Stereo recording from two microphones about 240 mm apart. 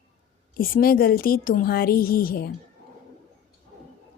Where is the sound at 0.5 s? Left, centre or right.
Left.